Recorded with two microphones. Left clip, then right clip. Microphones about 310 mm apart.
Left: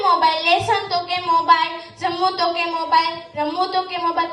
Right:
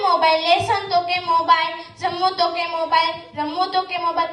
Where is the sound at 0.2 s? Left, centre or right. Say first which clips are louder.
Even; right.